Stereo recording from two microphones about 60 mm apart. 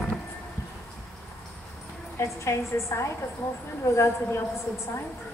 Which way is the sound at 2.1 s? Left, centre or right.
Left.